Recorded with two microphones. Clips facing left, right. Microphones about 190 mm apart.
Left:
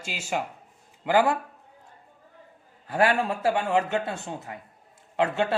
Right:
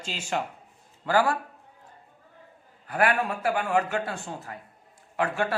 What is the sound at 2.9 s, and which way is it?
A man's voice, 25° left (ahead or behind).